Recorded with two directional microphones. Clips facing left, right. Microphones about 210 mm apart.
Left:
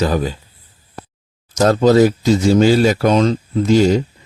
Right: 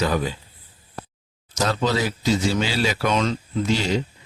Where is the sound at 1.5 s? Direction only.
45° left (ahead or behind).